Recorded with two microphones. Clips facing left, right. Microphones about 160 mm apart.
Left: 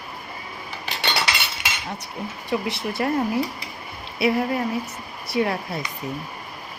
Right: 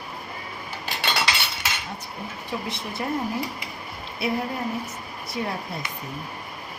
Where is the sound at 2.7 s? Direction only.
70° left (ahead or behind).